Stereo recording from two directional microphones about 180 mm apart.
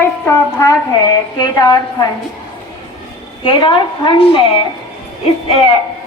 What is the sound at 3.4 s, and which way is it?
A woman's voice, 25° left (ahead or behind).